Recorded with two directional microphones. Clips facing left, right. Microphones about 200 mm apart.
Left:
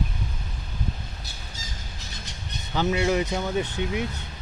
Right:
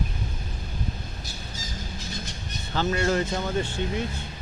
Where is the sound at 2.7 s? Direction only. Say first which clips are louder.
Left 1 dB; 10° left (ahead or behind).